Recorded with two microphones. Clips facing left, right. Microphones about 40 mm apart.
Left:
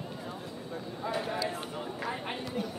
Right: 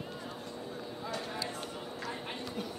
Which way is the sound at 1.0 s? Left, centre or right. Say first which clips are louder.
Left 7 dB; centre.